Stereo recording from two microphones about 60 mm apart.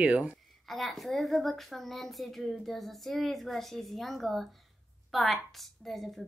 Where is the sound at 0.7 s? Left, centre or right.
Centre.